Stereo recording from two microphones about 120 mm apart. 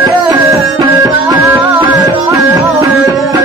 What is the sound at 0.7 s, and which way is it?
Music, 30° right (ahead or behind).